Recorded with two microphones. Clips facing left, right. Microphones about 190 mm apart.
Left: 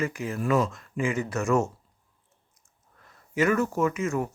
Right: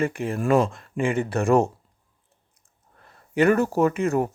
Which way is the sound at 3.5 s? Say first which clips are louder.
Right 4 dB; 35° right (ahead or behind).